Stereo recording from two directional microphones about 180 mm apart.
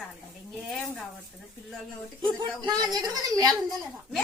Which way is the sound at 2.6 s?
20° right (ahead or behind).